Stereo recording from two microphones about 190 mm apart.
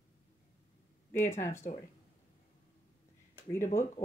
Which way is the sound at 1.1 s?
15° left (ahead or behind).